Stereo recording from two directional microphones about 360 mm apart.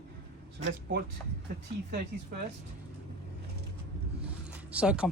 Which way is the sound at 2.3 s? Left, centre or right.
Right.